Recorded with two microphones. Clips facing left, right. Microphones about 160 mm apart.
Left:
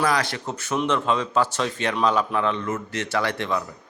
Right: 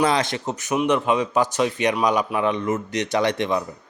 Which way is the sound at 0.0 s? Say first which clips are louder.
Right 3 dB; 20° right (ahead or behind).